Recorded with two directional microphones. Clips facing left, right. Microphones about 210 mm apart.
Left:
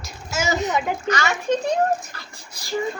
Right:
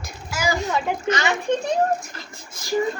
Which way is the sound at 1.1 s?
20° right (ahead or behind).